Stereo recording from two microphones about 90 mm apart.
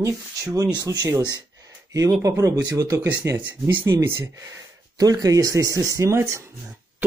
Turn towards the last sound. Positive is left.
turn(degrees=-30)  # may be behind; listen again after turning